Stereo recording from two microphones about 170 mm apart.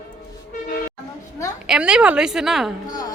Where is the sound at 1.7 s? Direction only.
5° right (ahead or behind).